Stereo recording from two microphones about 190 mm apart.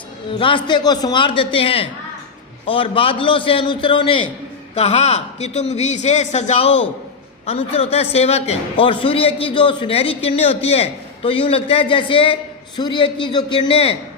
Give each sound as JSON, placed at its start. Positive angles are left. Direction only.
{"t": 0.3, "sound": "a man's voice", "side_deg": 25}